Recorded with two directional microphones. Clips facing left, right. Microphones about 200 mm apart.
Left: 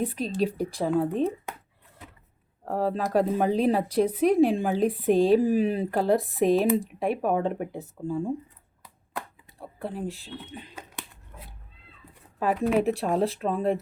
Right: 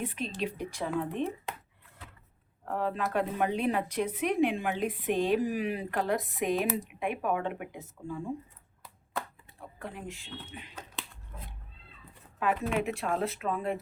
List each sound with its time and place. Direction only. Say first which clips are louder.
0.0 s a woman's voice: left 7 dB; 35° left (ahead or behind)
2.6 s a woman's voice: left 5 dB; 35° left (ahead or behind)
9.5 s a sound: left 7 dB; 35° left (ahead or behind)
12.4 s a woman's voice: left 6 dB; 35° left (ahead or behind)